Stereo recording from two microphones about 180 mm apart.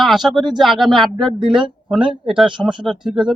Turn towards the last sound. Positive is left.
turn(degrees=-5)  # may be behind; listen again after turning